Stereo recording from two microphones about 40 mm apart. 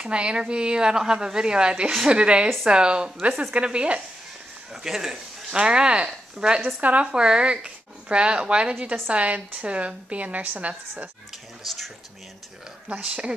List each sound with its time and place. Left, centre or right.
0.0 s speech: right
4.8 s speech: centre
5.5 s speech: right
6.8 s a woman's voice: right
7.2 s a woman's voice: right
11.6 s speech: centre
13.1 s speech: right